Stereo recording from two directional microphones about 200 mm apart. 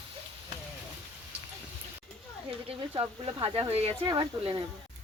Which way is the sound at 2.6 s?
25° right (ahead or behind).